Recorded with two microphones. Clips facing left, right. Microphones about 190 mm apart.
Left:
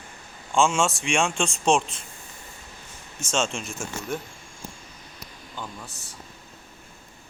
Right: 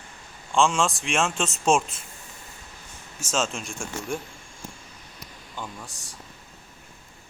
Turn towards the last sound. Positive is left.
turn(degrees=-10)  # may be behind; listen again after turning